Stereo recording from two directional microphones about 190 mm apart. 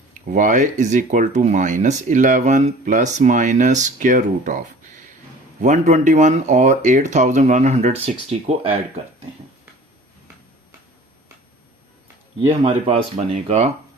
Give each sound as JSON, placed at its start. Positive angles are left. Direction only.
{"t": 0.1, "sound": "speech", "side_deg": -40}
{"t": 12.4, "sound": "speech", "side_deg": -25}